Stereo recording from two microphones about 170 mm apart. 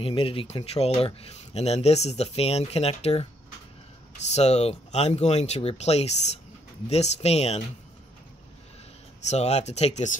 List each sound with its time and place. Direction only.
0.0 s speech: 30° left (ahead or behind)
4.3 s speech: 40° left (ahead or behind)
9.3 s speech: 40° left (ahead or behind)